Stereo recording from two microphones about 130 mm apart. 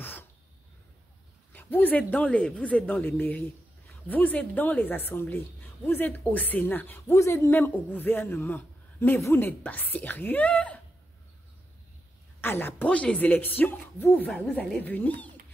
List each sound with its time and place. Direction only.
0.0 s a sound: 15° left (ahead or behind)
1.5 s a woman's voice: 15° left (ahead or behind)
12.4 s a woman's voice: 15° left (ahead or behind)